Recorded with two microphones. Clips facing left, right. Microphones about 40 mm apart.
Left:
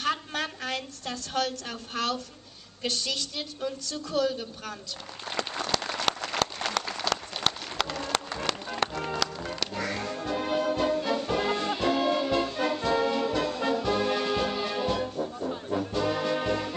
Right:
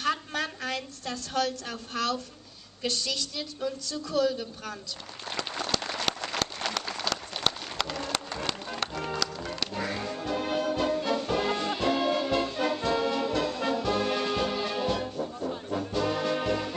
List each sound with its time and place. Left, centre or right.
0.0 s a sound: left
2.9 s a woman's voice: left
5.3 s applause: centre
9.8 s music: centre